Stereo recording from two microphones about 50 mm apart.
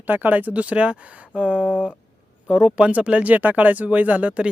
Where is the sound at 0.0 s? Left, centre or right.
Right.